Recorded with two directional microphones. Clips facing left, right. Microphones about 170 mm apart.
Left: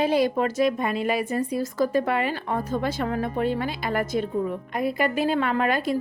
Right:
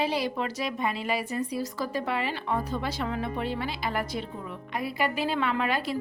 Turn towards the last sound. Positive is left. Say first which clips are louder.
# left 5 dB
turn(degrees=50)  # may be behind; listen again after turning